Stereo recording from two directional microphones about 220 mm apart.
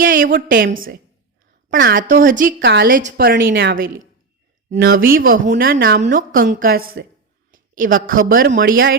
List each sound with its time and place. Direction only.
0.0 s a woman's voice: 40° right (ahead or behind)